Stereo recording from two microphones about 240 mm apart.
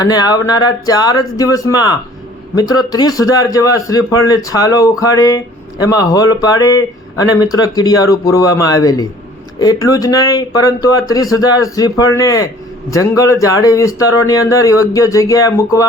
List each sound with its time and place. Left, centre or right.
0.0 s speech: centre